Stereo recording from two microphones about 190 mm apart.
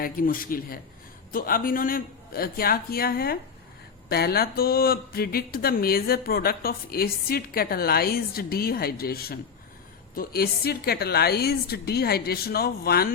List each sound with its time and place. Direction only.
0.0 s a woman's voice: 50° left (ahead or behind)